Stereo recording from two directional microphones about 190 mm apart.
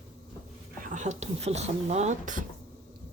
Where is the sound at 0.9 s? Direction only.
35° right (ahead or behind).